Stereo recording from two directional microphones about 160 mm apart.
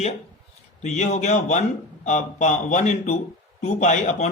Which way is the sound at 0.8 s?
45° left (ahead or behind).